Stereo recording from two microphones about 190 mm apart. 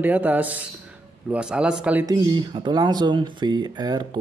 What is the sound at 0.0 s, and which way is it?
A man's voice, 10° right (ahead or behind).